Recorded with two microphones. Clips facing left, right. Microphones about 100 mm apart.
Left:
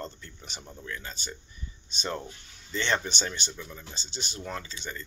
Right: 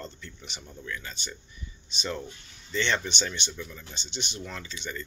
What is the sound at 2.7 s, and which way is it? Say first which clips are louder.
Speech: right 1 dB; 40° left (ahead or behind).